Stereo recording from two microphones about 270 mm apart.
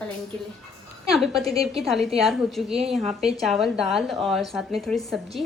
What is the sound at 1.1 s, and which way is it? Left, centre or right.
A woman's voice, centre.